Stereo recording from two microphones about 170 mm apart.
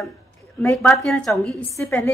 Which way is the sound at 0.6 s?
10° left (ahead or behind).